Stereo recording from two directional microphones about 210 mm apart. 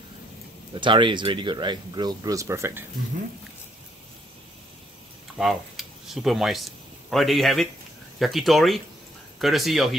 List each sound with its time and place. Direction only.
0.7 s speech: 20° right (ahead or behind)
5.4 s speech: centre (ahead or behind)